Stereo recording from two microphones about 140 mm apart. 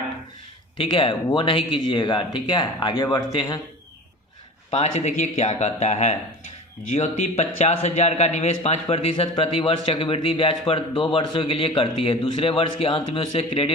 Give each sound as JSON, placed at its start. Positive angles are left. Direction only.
{"t": 0.8, "sound": "speech", "side_deg": 40}
{"t": 4.7, "sound": "a man's voice", "side_deg": 55}